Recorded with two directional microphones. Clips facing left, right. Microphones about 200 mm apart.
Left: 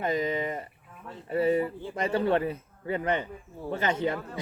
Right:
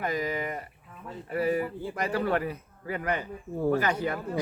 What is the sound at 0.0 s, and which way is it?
Speech, 25° left (ahead or behind).